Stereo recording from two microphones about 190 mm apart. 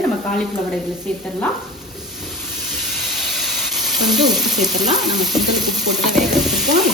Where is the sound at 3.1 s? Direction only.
Centre (ahead or behind).